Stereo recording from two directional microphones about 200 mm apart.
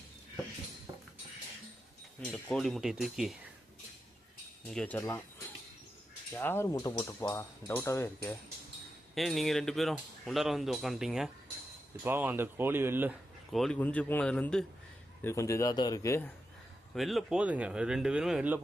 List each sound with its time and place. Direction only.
0.9 s a sound: 15° right (ahead or behind)
2.2 s speech: centre (ahead or behind)
4.7 s speech: 5° left (ahead or behind)
6.3 s speech: 10° left (ahead or behind)
9.1 s speech: centre (ahead or behind)
16.9 s speech: centre (ahead or behind)